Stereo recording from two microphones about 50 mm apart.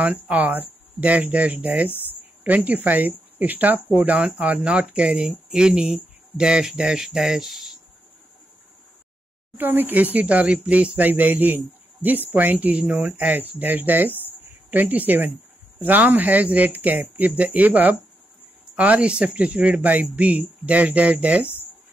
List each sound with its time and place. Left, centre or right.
0.0 s speech: right; by 7.7 s centre
9.6 s speech: right